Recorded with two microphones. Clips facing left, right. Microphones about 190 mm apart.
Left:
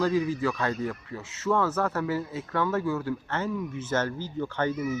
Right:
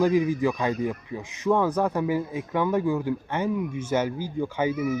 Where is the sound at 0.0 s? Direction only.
15° right (ahead or behind).